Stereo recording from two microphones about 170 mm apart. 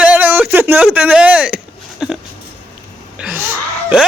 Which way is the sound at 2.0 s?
5° right (ahead or behind).